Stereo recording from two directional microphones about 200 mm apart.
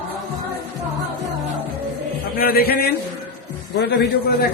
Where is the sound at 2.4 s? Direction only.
50° left (ahead or behind).